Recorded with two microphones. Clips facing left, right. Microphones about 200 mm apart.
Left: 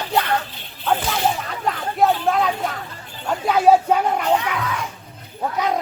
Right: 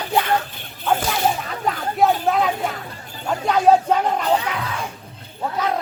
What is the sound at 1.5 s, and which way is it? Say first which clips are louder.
Speech: right 1 dB; centre (ahead or behind).